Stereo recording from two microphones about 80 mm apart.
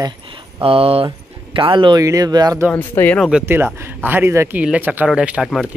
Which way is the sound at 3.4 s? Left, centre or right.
Right.